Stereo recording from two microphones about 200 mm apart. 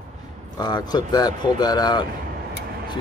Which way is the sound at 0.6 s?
20° left (ahead or behind).